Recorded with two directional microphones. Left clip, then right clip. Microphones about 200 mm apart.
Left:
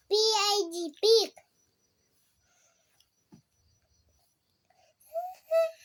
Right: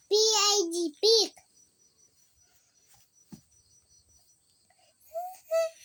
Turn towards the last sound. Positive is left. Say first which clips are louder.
# left 2 dB
turn(degrees=5)  # may be behind; listen again after turning